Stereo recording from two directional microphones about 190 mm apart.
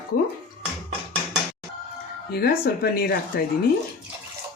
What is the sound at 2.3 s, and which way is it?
Speech, 55° left (ahead or behind).